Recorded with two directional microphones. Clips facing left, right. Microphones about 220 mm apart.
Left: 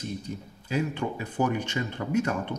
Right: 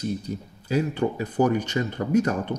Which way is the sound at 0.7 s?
35° right (ahead or behind).